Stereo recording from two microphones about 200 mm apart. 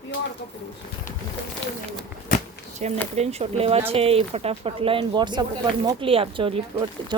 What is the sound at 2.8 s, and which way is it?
Speech, 35° right (ahead or behind).